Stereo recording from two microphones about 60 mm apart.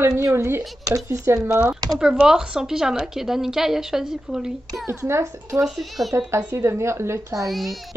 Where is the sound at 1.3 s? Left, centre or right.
Right.